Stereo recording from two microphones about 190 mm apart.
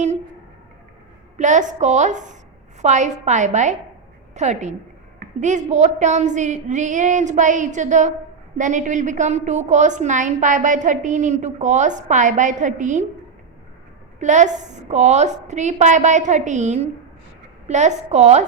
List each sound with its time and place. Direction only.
1.4 s a woman's voice: 40° right (ahead or behind)
14.2 s a woman's voice: 40° right (ahead or behind)